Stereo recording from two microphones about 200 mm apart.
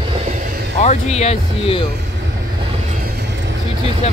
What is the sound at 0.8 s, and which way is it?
Speech, 35° left (ahead or behind).